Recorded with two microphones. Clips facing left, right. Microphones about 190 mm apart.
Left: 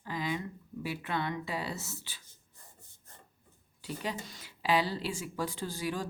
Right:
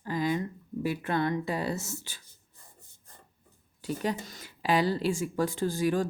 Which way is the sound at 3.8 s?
45° right (ahead or behind).